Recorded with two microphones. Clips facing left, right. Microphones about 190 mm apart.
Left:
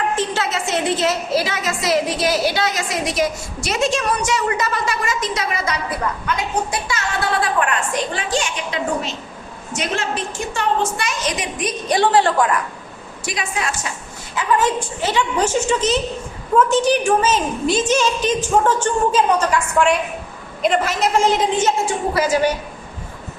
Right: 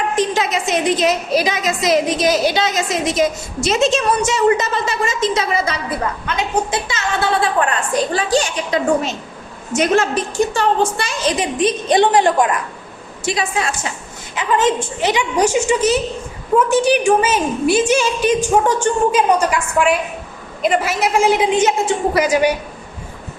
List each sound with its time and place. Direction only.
0.2 s a woman's voice: 15° right (ahead or behind); by 8.8 s 35° right (ahead or behind)
9.7 s a woman's voice: 45° right (ahead or behind)
10.5 s a woman's voice: 35° right (ahead or behind)
13.2 s a woman's voice: 30° right (ahead or behind)
14.3 s a woman's voice: 20° right (ahead or behind)